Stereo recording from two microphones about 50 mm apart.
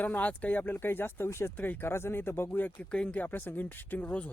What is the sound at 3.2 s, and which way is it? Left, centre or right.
Speech, left.